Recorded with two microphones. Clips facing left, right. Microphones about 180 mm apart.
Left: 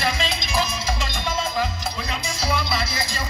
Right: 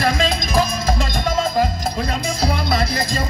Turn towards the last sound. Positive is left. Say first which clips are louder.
# right 6 dB
turn(degrees=-50)  # may be behind; listen again after turning